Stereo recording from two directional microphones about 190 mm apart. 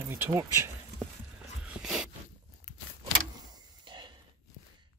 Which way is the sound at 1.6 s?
5° right (ahead or behind).